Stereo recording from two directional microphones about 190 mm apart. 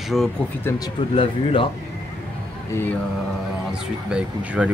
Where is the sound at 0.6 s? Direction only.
20° left (ahead or behind).